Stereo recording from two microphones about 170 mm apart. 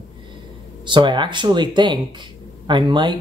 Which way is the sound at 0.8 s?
25° right (ahead or behind).